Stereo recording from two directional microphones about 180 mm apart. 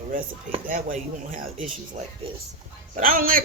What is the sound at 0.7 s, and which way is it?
Speech, 45° right (ahead or behind).